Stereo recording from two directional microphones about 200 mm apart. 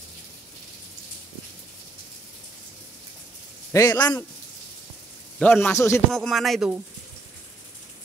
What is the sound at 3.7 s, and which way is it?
Speech, 15° left (ahead or behind).